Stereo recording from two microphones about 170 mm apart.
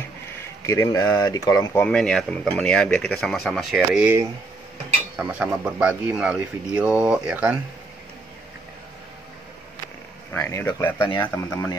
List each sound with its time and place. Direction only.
0.7 s speech: 20° left (ahead or behind)
1.9 s speech: 5° left (ahead or behind)
10.3 s speech: 15° left (ahead or behind)